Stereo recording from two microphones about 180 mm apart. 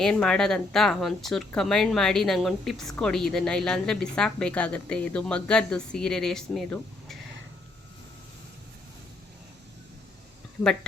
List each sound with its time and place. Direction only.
0.0 s a woman's voice: 5° left (ahead or behind)